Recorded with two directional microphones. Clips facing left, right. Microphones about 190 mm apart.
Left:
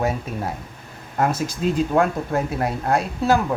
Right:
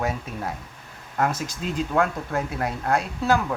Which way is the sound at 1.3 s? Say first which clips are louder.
Left 6 dB; 10° left (ahead or behind).